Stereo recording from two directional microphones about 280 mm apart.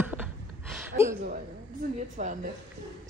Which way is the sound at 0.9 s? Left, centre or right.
Right.